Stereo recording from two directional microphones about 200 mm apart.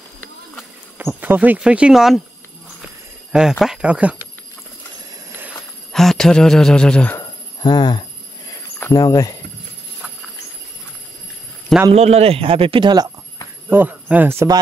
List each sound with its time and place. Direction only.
0.9 s speech: 10° right (ahead or behind)
2.8 s a sound: 5° right (ahead or behind)
5.9 s speech: centre (ahead or behind)
7.6 s speech: 20° left (ahead or behind)
11.9 s speech: 30° right (ahead or behind)
13.7 s speech: 10° right (ahead or behind)